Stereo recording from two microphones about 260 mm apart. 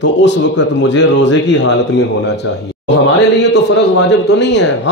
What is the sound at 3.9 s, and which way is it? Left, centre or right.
Speech, left.